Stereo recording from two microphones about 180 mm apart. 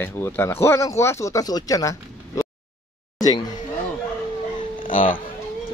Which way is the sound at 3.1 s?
20° left (ahead or behind).